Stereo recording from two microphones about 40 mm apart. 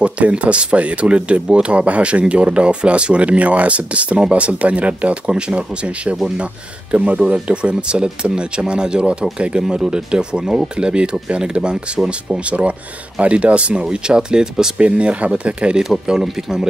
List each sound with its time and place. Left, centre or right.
0.0 s speech: right
14.8 s speech: right
16.3 s speech: centre